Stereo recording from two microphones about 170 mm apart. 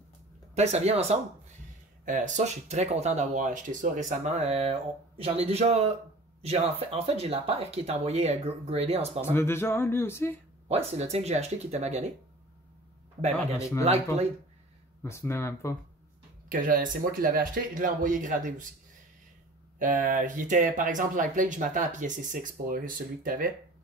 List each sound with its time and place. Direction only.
0.6 s speech: 40° right (ahead or behind)
9.2 s speech: 15° left (ahead or behind)
10.7 s speech: 35° right (ahead or behind)
13.6 s speech: 20° left (ahead or behind)
15.0 s speech: 15° left (ahead or behind)
16.4 s speech: 55° right (ahead or behind)
19.8 s speech: 50° right (ahead or behind)